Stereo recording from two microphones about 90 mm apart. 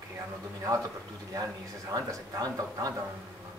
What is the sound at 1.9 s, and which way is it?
Speech, 40° right (ahead or behind).